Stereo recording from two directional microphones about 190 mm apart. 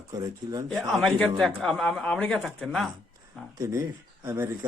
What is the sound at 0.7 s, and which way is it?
Speech, centre (ahead or behind).